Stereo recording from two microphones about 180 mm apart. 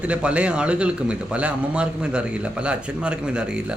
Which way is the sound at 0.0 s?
5° right (ahead or behind).